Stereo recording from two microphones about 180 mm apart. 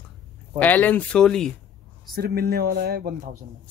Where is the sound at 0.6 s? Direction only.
10° left (ahead or behind).